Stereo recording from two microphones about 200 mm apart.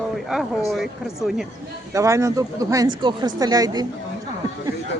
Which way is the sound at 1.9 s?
15° right (ahead or behind).